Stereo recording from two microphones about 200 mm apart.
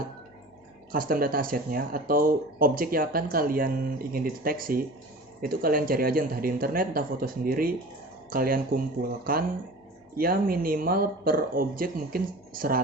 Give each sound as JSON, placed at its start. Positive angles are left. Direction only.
{"t": 0.9, "sound": "speech", "side_deg": -45}